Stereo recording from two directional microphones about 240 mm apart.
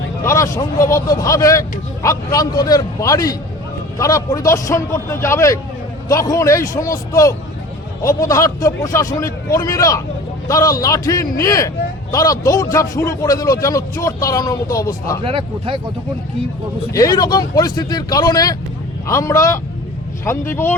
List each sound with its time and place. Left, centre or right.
0.3 s speech: centre
15.2 s speech: right
16.9 s speech: centre